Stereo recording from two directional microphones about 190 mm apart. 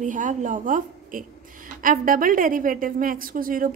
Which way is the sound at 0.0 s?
40° right (ahead or behind).